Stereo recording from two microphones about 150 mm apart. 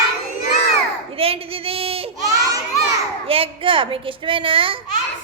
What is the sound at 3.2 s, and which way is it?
A woman's voice, 40° right (ahead or behind).